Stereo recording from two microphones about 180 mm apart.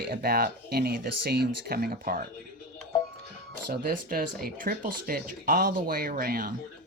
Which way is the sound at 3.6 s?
50° right (ahead or behind).